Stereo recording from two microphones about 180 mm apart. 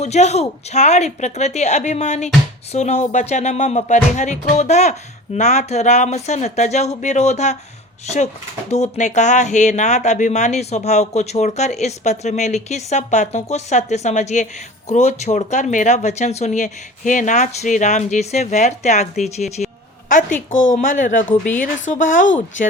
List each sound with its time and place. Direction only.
0.0 s speech: 40° left (ahead or behind)
8.7 s a woman's voice: 40° left (ahead or behind)
21.2 s a woman's voice: 10° left (ahead or behind)
21.6 s speech: 45° left (ahead or behind)